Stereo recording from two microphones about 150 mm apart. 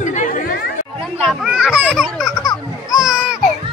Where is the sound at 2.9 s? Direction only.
5° right (ahead or behind).